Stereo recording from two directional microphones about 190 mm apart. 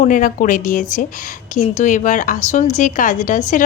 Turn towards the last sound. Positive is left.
turn(degrees=40)  # may be behind; listen again after turning